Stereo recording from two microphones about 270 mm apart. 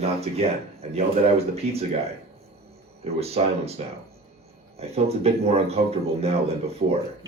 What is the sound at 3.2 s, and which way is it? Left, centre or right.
Speech, right.